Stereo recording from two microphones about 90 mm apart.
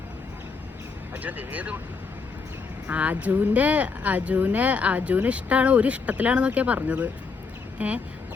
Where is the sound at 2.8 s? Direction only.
15° right (ahead or behind).